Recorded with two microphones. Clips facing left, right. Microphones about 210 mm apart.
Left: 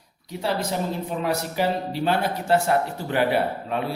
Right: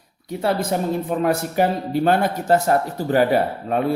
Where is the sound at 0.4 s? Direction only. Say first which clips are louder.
Right 4 dB; 50° right (ahead or behind).